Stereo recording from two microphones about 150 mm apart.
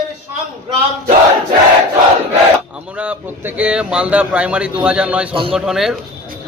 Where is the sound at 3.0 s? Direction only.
10° right (ahead or behind).